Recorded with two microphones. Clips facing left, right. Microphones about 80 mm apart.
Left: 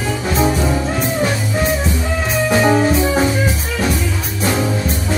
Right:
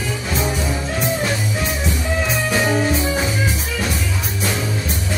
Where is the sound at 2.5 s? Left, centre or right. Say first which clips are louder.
Left 6 dB; left.